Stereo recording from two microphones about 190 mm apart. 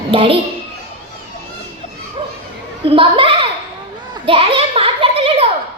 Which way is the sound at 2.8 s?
30° right (ahead or behind).